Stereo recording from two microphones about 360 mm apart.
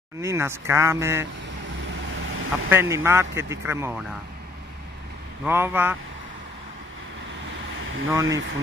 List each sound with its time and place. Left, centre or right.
0.2 s speech: centre
2.1 s vehicle: right
2.7 s speech: centre
5.4 s speech: centre
8.1 s speech: centre